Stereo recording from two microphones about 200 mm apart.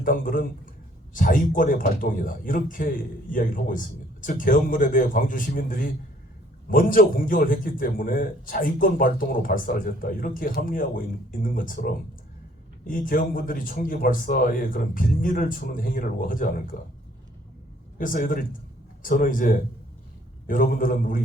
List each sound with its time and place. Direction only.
0.0 s a man's voice: 40° left (ahead or behind)
17.9 s a man's voice: 40° left (ahead or behind)